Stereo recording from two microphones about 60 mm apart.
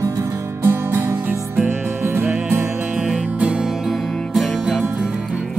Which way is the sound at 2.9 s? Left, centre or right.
Centre.